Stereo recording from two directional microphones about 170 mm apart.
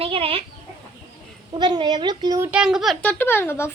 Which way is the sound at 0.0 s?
35° right (ahead or behind).